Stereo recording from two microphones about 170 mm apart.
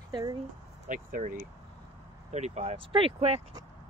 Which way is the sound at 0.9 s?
50° right (ahead or behind).